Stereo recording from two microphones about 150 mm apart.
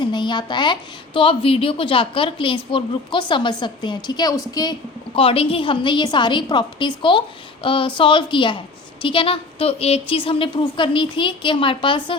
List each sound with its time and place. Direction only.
0.0 s a woman's voice: 30° left (ahead or behind)
5.1 s a woman's voice: 40° left (ahead or behind)